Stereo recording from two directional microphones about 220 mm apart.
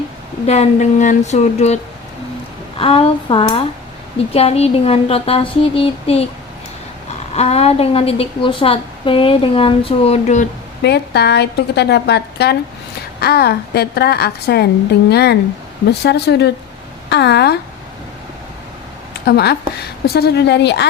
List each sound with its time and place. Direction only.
0.4 s a woman's voice: 30° left (ahead or behind)
7.3 s a woman's voice: 30° left (ahead or behind)
10.8 s a woman's voice: 50° left (ahead or behind)
19.2 s a woman's voice: 45° left (ahead or behind)